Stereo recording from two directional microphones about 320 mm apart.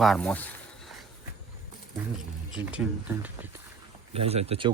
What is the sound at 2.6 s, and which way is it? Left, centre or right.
Speech, centre.